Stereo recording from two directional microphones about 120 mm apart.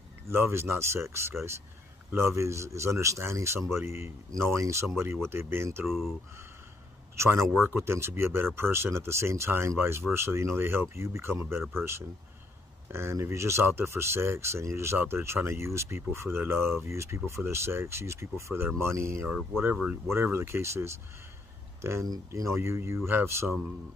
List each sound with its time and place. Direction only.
0.3 s speech: 20° right (ahead or behind)
5.9 s speech: centre (ahead or behind)
7.2 s speech: 20° right (ahead or behind)